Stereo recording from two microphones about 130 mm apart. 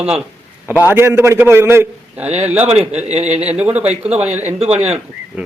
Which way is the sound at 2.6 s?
55° right (ahead or behind).